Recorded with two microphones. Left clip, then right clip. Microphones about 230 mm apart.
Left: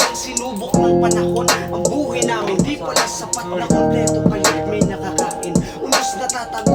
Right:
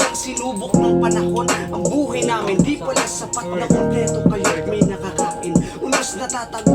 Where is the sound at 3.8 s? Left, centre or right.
Left.